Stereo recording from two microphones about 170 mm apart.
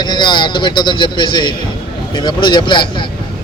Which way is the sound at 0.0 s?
25° left (ahead or behind).